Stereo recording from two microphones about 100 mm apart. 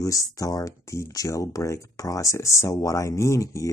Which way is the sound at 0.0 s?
35° left (ahead or behind).